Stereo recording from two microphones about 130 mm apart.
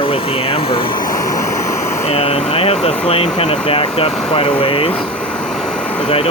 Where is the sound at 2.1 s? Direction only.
50° left (ahead or behind).